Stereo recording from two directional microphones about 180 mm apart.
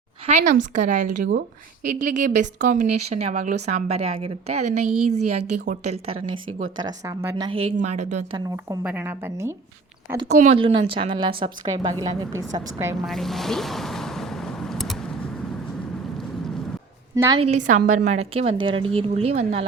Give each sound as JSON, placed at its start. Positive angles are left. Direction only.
{"t": 0.3, "sound": "a woman's voice", "side_deg": -40}
{"t": 6.7, "sound": "a woman's voice", "side_deg": -20}
{"t": 7.8, "sound": "a woman's voice", "side_deg": -40}
{"t": 8.8, "sound": "a woman's voice", "side_deg": -10}
{"t": 10.2, "sound": "a woman's voice", "side_deg": -40}
{"t": 13.1, "sound": "boat", "side_deg": 0}
{"t": 17.2, "sound": "a woman's voice", "side_deg": -20}
{"t": 17.4, "sound": "a woman's voice", "side_deg": -40}